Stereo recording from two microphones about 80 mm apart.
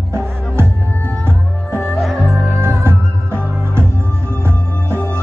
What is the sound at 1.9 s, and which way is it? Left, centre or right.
Music, centre.